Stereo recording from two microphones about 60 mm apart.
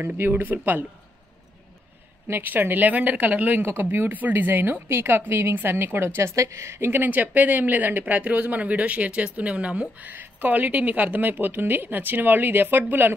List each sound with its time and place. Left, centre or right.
0.0 s a woman's voice: right
2.2 s a woman's voice: right